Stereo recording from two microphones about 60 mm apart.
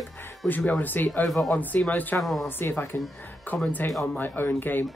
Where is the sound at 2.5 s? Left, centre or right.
Left.